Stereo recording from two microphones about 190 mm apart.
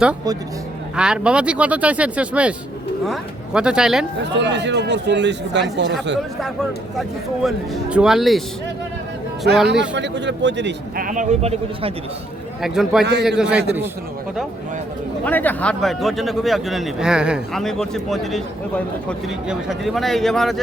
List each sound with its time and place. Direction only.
0.9 s a man's voice: 5° right (ahead or behind)
4.4 s speech: 65° right (ahead or behind)
7.4 s a man's voice: 5° right (ahead or behind)
9.6 s speech: 70° right (ahead or behind)
11.0 s speech: 40° right (ahead or behind)
12.6 s a man's voice: centre (ahead or behind)
15.2 s a man's voice: 10° left (ahead or behind)
19.5 s a man's voice: centre (ahead or behind)